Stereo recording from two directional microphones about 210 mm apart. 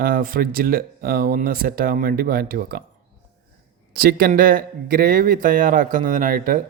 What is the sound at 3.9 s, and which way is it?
Speech, 45° right (ahead or behind).